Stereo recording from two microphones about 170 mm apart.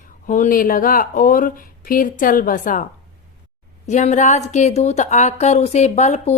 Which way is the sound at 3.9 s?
45° left (ahead or behind).